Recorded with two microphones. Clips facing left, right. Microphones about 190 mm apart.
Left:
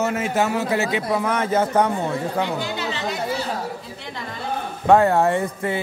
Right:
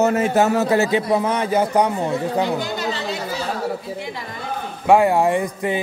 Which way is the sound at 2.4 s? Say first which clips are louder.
Right 3 dB; 40° right (ahead or behind).